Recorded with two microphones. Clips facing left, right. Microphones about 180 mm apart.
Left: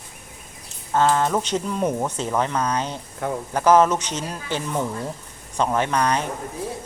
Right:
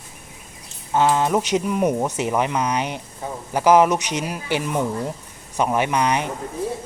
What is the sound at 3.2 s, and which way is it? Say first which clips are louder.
Speech: left 5 dB; 65° left (ahead or behind).